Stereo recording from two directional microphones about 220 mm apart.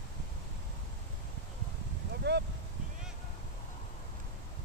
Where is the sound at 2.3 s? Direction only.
50° right (ahead or behind).